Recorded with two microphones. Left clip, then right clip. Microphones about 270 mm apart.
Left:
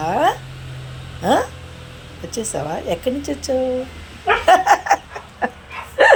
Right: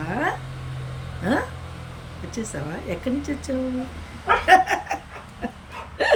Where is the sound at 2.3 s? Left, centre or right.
Centre.